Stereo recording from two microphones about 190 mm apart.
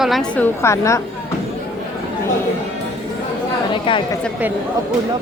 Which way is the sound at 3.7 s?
25° left (ahead or behind).